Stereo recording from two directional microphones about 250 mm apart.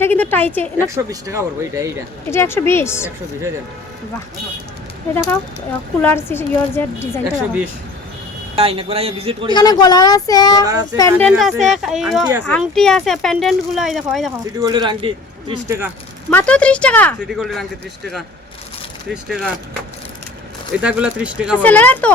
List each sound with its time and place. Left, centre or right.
0.0 s a woman's voice: centre
0.9 s speech: centre
2.3 s a woman's voice: centre
5.1 s a woman's voice: centre
8.5 s speech: right
9.5 s a woman's voice: centre
14.6 s speech: centre
16.3 s speech: centre
19.1 s speech: centre
20.8 s speech: centre
21.6 s a woman's voice: centre